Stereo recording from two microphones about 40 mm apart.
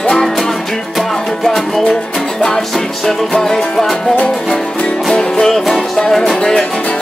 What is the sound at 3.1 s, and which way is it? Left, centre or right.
Music, centre.